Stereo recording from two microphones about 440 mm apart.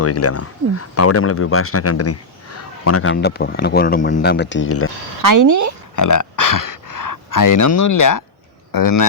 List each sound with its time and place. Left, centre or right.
0.0 s speech: left
5.2 s speech: right
6.0 s speech: left